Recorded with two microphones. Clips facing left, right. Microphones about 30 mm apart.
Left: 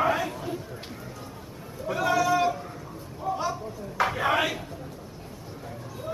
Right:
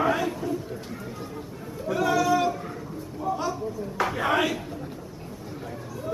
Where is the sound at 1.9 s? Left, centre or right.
Centre.